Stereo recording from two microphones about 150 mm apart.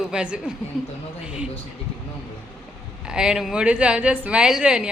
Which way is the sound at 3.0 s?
5° right (ahead or behind).